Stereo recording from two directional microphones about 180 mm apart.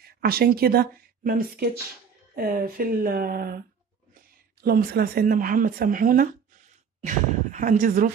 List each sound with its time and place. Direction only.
0.0 s speech: 60° right (ahead or behind)
4.6 s speech: 55° right (ahead or behind)